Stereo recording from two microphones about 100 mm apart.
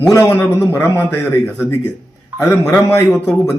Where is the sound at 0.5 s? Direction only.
25° left (ahead or behind).